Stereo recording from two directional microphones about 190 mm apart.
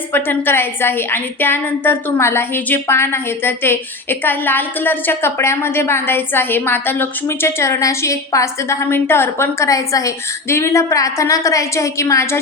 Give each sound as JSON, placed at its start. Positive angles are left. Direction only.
{"t": 0.1, "sound": "a woman's voice", "side_deg": 10}